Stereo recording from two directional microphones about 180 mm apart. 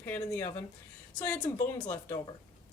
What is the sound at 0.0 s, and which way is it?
A woman's voice, 15° left (ahead or behind).